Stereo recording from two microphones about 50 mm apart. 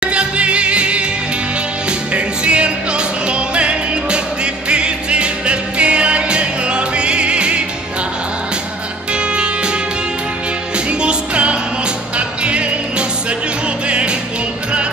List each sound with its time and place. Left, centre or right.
0.1 s music: right
2.1 s music: right
11.0 s music: right
13.8 s music: right